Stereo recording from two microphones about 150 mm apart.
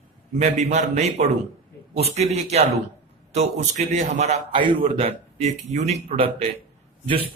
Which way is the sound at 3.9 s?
55° right (ahead or behind).